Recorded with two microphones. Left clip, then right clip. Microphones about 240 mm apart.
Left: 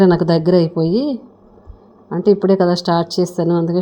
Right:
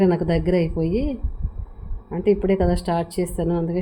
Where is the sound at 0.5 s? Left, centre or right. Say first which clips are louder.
Left 7 dB; left.